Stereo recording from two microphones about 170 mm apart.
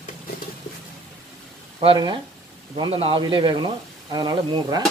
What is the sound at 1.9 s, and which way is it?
Speech, 25° right (ahead or behind).